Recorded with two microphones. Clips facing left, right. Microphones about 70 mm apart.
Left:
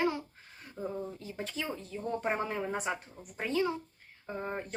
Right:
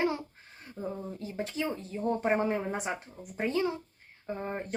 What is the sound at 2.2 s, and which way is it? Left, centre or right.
Speech, right.